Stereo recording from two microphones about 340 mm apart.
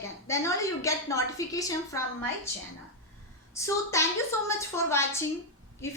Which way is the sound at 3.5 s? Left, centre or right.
Centre.